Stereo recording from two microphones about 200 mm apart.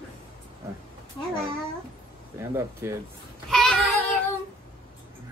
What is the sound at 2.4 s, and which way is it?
Speech, 15° right (ahead or behind).